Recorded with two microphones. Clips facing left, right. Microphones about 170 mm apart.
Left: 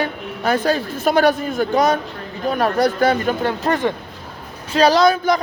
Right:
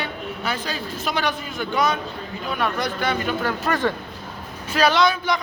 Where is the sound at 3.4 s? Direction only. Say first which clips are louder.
Left 3 dB; 25° left (ahead or behind).